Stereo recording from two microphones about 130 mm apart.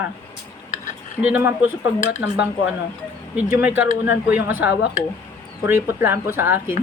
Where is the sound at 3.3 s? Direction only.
10° right (ahead or behind).